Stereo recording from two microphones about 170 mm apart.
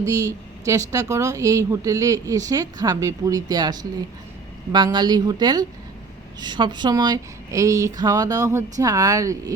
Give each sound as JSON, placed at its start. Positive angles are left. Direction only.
{"t": 0.0, "sound": "speech", "side_deg": -20}